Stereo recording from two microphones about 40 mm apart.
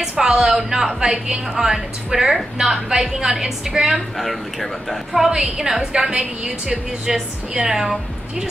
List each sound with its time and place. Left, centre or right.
0.0 s a woman's voice: centre
4.2 s a woman's voice: centre